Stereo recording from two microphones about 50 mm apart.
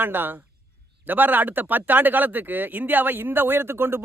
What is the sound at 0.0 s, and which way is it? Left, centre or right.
A man's voice, right.